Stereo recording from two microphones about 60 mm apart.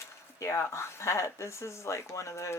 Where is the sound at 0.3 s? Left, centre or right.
Left.